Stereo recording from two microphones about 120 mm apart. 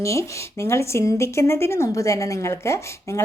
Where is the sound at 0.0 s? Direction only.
25° left (ahead or behind).